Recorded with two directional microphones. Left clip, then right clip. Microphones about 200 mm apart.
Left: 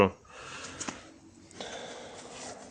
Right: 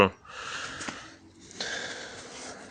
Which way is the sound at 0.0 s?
Centre (ahead or behind).